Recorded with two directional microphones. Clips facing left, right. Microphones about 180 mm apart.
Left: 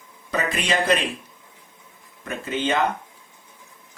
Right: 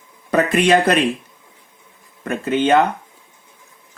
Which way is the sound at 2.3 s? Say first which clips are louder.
Right 8 dB; 60° right (ahead or behind).